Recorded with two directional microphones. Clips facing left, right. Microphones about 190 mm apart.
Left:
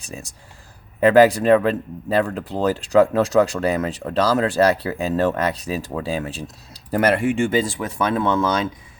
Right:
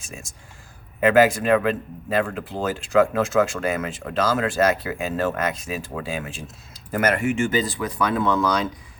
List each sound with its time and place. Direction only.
0.0 s speech: 35° left (ahead or behind)